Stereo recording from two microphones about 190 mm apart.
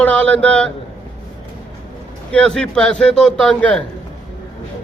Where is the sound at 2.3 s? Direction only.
5° left (ahead or behind).